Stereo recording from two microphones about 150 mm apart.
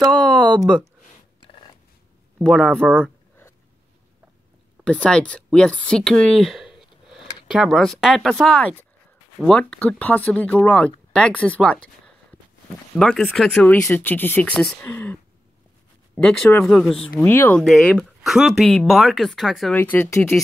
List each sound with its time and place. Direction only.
0.1 s a sound: 5° left (ahead or behind)
1.5 s a sound: 35° left (ahead or behind)
2.4 s speech: centre (ahead or behind)
3.0 s a sound: 15° left (ahead or behind)
4.8 s speech: 5° left (ahead or behind)
12.9 s speech: 5° left (ahead or behind)
16.2 s speech: 5° left (ahead or behind)
17.2 s speech: 15° left (ahead or behind)
17.6 s speech: 5° left (ahead or behind)
19.8 s speech: 15° left (ahead or behind)